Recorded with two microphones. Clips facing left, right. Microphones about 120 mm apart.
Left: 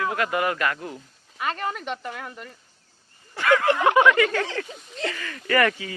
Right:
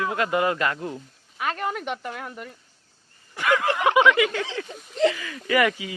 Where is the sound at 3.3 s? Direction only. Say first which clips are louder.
Left 3 dB; 15° right (ahead or behind).